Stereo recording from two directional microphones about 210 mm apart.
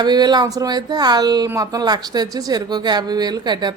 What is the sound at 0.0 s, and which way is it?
Speech, 20° right (ahead or behind).